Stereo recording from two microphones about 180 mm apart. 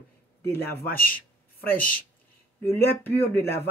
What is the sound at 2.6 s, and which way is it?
Speech, 10° left (ahead or behind).